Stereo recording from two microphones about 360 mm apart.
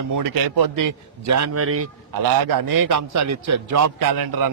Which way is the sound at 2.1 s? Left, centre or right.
Right.